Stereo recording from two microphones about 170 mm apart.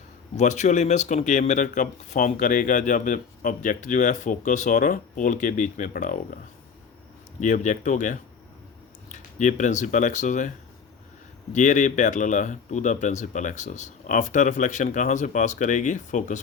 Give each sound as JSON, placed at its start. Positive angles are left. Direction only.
{"t": 0.3, "sound": "speech", "side_deg": 45}
{"t": 7.4, "sound": "speech", "side_deg": 45}
{"t": 11.5, "sound": "speech", "side_deg": 45}